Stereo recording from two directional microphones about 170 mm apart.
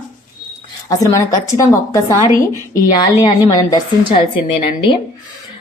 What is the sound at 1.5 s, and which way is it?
A woman's voice, 20° left (ahead or behind).